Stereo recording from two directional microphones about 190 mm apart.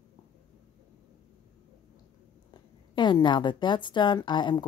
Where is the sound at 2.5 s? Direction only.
20° left (ahead or behind).